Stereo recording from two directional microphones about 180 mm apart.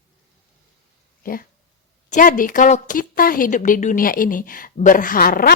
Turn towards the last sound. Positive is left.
turn(degrees=55)  # may be behind; listen again after turning